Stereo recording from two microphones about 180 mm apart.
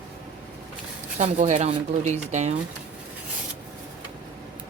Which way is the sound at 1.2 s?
40° right (ahead or behind).